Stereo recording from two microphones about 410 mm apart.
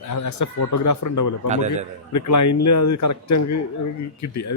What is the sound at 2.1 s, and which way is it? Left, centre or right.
Speech, left.